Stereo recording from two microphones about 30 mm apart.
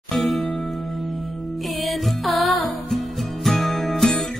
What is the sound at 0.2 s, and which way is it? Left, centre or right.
Music, centre.